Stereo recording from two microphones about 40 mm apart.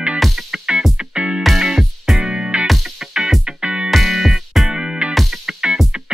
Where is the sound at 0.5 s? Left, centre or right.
Right.